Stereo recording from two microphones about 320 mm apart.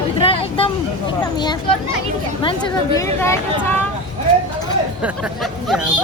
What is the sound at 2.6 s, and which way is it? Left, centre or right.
Speech, centre.